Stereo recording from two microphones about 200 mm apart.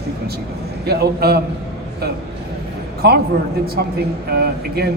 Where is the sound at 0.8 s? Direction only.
55° right (ahead or behind).